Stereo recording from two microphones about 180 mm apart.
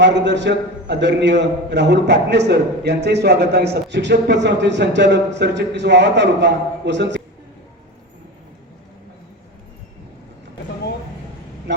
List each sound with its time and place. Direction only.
0.0 s a man's voice: 75° right (ahead or behind)